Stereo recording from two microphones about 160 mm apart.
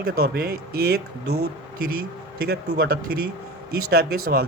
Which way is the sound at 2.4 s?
75° right (ahead or behind).